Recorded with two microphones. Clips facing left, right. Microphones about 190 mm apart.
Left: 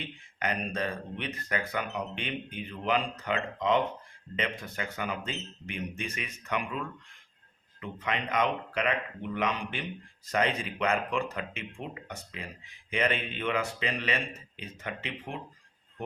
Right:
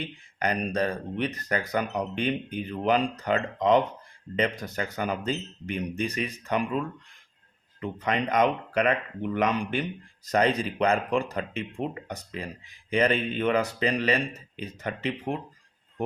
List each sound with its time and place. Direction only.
0.3 s speech: 40° right (ahead or behind)
7.8 s speech: 40° right (ahead or behind)